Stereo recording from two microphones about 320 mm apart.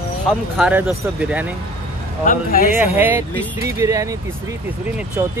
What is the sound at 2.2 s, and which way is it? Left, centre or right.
Speech, left.